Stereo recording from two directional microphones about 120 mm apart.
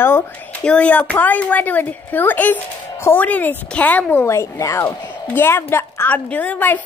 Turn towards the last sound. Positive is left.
turn(degrees=15)  # may be behind; listen again after turning